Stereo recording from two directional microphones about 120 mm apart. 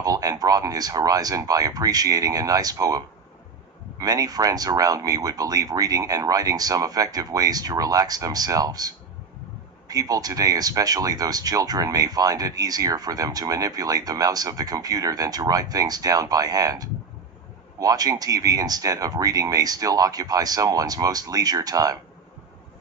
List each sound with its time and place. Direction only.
0.0 s speech: 30° right (ahead or behind)
4.0 s speech: 30° right (ahead or behind)